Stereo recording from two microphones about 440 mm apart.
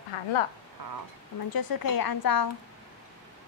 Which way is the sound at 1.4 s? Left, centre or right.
Left.